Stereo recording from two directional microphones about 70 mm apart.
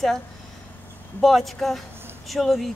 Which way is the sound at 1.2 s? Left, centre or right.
Centre.